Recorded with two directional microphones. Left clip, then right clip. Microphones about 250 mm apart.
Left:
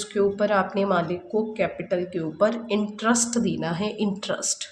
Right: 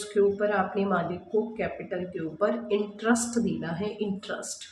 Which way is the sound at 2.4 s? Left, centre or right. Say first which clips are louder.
Left 3 dB; left.